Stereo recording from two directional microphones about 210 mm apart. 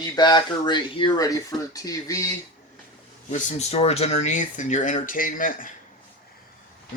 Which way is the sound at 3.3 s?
30° left (ahead or behind).